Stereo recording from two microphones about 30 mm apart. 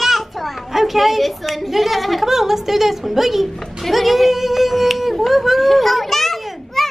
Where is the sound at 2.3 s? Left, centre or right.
Centre.